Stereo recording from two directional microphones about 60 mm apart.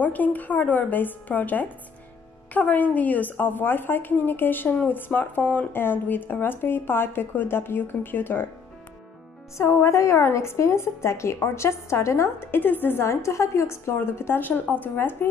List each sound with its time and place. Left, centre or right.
0.0 s speech: left
9.6 s a woman's voice: left
12.4 s a woman's voice: left